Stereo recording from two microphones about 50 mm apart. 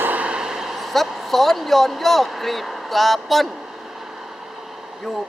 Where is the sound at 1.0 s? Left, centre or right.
Centre.